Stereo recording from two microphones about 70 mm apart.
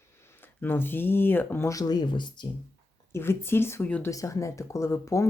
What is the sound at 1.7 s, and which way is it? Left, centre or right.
Speech, left.